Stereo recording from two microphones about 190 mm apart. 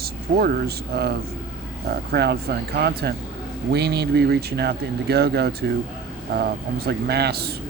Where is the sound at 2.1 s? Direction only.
60° right (ahead or behind).